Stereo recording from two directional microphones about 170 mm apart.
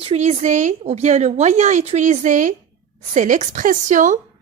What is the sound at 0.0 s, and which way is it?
Speech, 40° right (ahead or behind).